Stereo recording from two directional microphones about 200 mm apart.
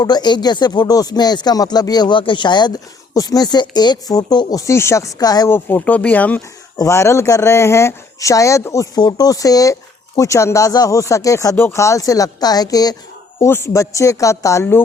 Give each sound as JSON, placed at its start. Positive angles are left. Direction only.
{"t": 0.0, "sound": "speech", "side_deg": 20}